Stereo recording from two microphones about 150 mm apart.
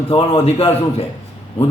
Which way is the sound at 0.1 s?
40° left (ahead or behind).